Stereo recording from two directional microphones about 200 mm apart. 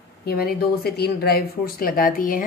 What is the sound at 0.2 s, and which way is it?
Speech, 50° left (ahead or behind).